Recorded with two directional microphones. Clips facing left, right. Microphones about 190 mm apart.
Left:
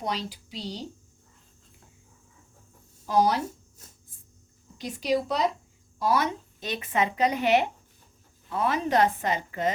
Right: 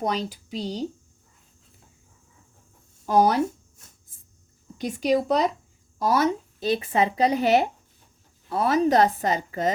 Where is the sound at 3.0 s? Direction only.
50° right (ahead or behind).